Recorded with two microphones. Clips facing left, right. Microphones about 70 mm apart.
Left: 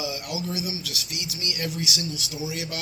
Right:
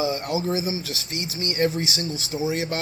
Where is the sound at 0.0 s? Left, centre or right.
Right.